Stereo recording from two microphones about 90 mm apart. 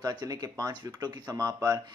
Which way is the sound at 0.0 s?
45° right (ahead or behind).